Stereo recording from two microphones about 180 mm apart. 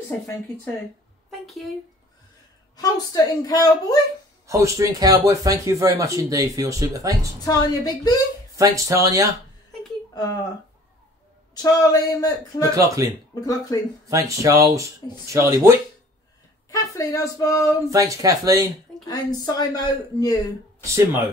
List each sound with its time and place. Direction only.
1.3 s a sound: centre (ahead or behind)
2.7 s a woman's voice: 20° left (ahead or behind)
4.5 s speech: 20° right (ahead or behind)
7.4 s a woman's voice: 20° left (ahead or behind)
8.5 s speech: 20° right (ahead or behind)
10.1 s speech: 20° left (ahead or behind)
11.5 s a woman's voice: 20° left (ahead or behind)
12.6 s speech: 20° right (ahead or behind)
13.3 s a woman's voice: 20° left (ahead or behind)
14.0 s speech: 20° right (ahead or behind)
16.7 s a woman's voice: 20° left (ahead or behind)
17.8 s speech: 15° right (ahead or behind)
19.0 s a woman's voice: 20° left (ahead or behind)
20.8 s speech: 15° right (ahead or behind)